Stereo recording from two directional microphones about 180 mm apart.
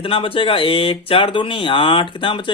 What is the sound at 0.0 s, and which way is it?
Speech, 30° left (ahead or behind).